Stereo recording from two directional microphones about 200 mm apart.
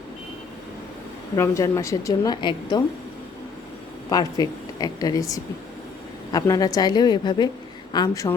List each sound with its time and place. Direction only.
1.4 s speech: 15° left (ahead or behind)
4.1 s a woman's voice: 20° left (ahead or behind)